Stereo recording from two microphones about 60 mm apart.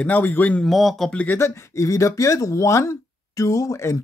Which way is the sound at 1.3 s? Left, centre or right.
Left.